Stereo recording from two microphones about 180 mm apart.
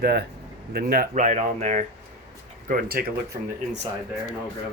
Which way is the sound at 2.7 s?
55° right (ahead or behind).